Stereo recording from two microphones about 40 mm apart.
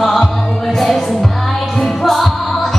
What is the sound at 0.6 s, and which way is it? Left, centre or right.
Music, centre.